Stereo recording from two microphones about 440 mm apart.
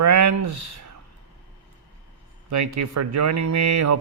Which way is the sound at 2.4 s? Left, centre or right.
Right.